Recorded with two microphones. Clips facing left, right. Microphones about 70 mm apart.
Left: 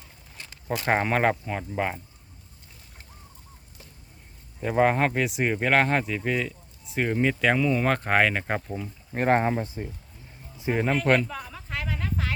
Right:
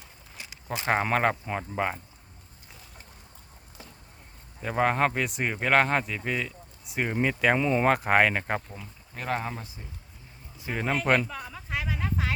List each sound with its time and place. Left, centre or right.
0.3 s a sound: centre
0.9 s speech: centre
4.6 s speech: centre
7.6 s speech: right
7.9 s speech: centre
9.1 s speech: left
10.8 s a sound: centre